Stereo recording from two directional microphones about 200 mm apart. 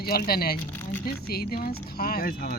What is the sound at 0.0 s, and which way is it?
Speech, 50° left (ahead or behind).